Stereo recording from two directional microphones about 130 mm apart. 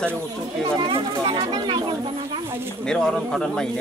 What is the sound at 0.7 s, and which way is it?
Speech, 40° right (ahead or behind).